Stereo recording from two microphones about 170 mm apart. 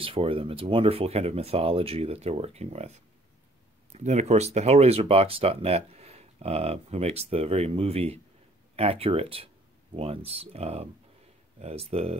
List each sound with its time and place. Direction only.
0.0 s speech: 35° right (ahead or behind)